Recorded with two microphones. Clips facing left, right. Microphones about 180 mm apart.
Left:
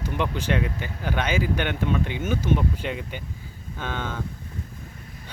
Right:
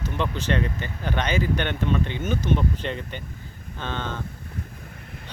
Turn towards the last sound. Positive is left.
turn(degrees=10)  # may be behind; listen again after turning